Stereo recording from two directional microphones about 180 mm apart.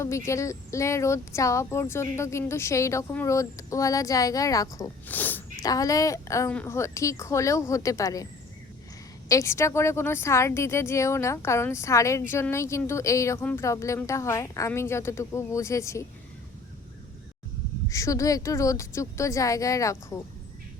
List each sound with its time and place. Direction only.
0.0 s speech: 15° left (ahead or behind)
9.3 s speech: 15° left (ahead or behind)
17.8 s speech: 15° left (ahead or behind)